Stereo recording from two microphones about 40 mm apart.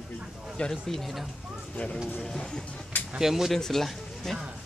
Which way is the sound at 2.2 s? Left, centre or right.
Centre.